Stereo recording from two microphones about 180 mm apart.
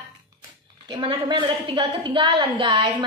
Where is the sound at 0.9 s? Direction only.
25° right (ahead or behind).